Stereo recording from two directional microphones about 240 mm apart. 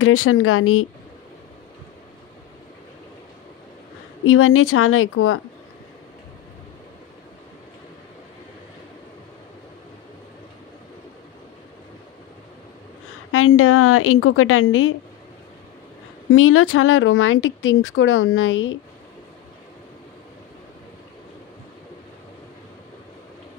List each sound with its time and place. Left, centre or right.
0.0 s speech: left
4.2 s speech: left
13.3 s speech: left
16.3 s speech: left